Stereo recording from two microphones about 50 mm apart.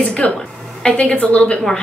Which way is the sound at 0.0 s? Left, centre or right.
Left.